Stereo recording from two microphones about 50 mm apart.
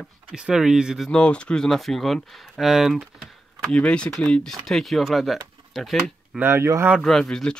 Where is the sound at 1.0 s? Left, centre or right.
Centre.